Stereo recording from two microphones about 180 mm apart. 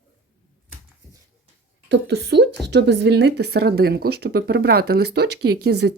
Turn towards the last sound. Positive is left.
turn(degrees=-65)  # may be behind; listen again after turning